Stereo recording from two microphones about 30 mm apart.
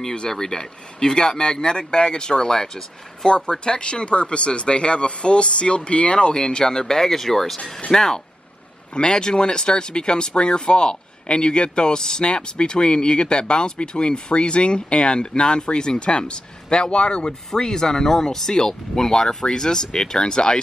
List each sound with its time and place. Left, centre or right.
0.3 s speech: left
3.3 s speech: left
6.1 s speech: left
8.9 s speech: left
17.3 s speech: centre